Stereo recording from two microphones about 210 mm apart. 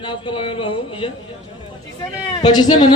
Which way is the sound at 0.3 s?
25° left (ahead or behind).